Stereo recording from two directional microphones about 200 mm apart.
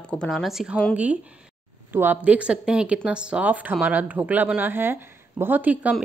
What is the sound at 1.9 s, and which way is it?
Speech, 10° right (ahead or behind).